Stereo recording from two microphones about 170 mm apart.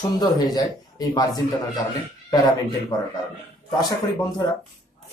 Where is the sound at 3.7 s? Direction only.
25° left (ahead or behind).